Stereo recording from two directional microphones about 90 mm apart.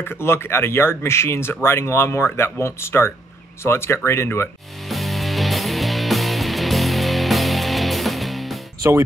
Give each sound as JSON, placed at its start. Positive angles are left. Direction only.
{"t": 0.0, "sound": "speech", "side_deg": 25}
{"t": 4.8, "sound": "music", "side_deg": 0}